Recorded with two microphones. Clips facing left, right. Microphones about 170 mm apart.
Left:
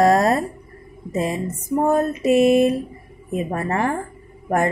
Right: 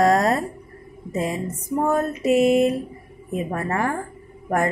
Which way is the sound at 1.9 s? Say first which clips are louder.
Left 1 dB; 25° left (ahead or behind).